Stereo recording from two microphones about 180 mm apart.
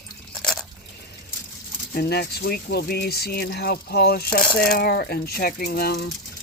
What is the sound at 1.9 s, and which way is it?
Speech, 60° left (ahead or behind).